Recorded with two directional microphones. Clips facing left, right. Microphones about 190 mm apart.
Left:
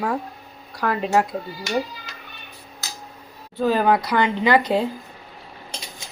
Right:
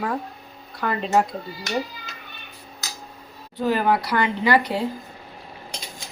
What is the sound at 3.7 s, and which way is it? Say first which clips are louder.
Speech: left 2 dB; 20° left (ahead or behind).